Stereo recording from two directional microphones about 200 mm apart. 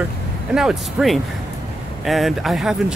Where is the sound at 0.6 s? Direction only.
Centre (ahead or behind).